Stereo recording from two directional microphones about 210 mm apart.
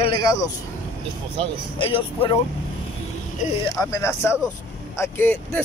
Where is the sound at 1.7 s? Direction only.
25° left (ahead or behind).